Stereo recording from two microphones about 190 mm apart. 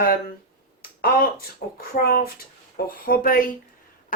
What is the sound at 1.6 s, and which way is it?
A woman's voice, 55° left (ahead or behind).